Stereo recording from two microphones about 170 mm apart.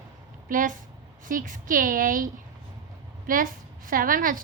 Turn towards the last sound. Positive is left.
turn(degrees=-55)  # may be behind; listen again after turning